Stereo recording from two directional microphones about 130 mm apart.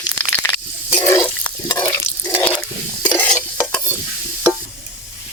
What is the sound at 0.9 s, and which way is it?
Water, 15° left (ahead or behind).